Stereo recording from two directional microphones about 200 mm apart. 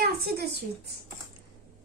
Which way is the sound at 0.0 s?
50° right (ahead or behind).